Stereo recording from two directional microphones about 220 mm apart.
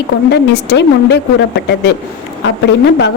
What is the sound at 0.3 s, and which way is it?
Speech, 50° left (ahead or behind).